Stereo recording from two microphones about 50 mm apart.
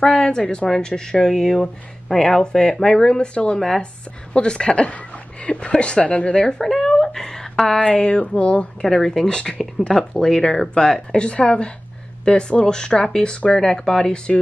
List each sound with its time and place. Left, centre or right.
0.0 s a woman's voice: centre
3.5 s a woman's voice: centre
4.3 s a woman's voice: centre
6.4 s a woman's voice: centre; by 8.6 s left
8.8 s a woman's voice: centre